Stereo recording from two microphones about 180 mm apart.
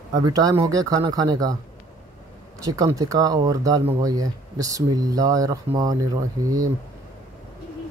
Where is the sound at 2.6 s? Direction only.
20° right (ahead or behind).